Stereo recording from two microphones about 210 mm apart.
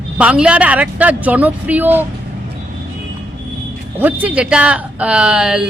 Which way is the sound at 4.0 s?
5° right (ahead or behind).